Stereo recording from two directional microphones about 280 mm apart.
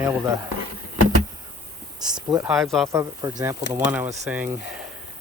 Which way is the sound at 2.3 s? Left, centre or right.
Centre.